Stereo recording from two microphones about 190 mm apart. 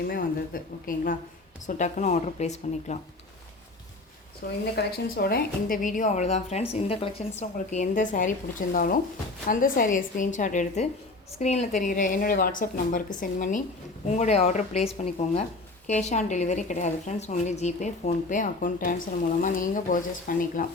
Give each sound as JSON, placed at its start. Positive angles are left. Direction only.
{"t": 0.1, "sound": "a woman's voice", "side_deg": 50}
{"t": 4.7, "sound": "a woman's voice", "side_deg": 50}